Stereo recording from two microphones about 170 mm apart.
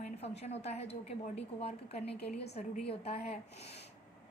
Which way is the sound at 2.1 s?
75° left (ahead or behind).